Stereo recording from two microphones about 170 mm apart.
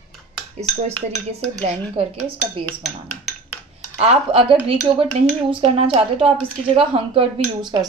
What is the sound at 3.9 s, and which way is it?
Speech, 35° right (ahead or behind).